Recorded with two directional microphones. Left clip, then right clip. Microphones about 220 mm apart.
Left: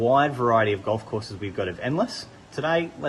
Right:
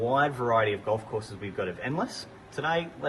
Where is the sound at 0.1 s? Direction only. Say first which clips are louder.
Left 5 dB; 40° left (ahead or behind).